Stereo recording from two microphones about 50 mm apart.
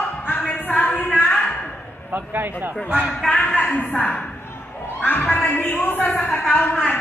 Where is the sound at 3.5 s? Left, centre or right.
Left.